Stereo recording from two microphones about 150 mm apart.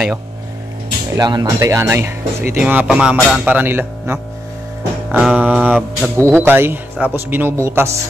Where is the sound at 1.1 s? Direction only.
25° right (ahead or behind).